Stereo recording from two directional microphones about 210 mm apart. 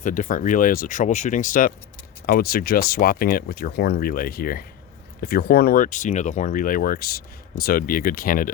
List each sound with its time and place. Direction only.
0.0 s speech: 40° left (ahead or behind)